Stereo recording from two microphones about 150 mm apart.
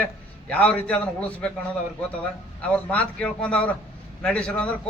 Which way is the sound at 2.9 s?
10° left (ahead or behind).